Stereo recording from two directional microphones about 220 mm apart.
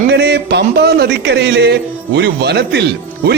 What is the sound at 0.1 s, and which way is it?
Speech, 50° right (ahead or behind).